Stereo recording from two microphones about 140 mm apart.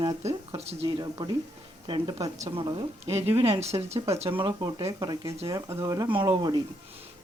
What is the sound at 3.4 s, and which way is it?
Speech, 45° right (ahead or behind).